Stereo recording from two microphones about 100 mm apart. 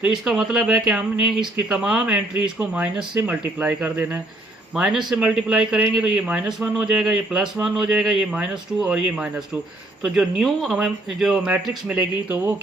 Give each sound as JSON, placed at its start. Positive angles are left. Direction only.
{"t": 0.0, "sound": "speech", "side_deg": -5}
{"t": 4.7, "sound": "speech", "side_deg": -5}
{"t": 12.3, "sound": "speech", "side_deg": -25}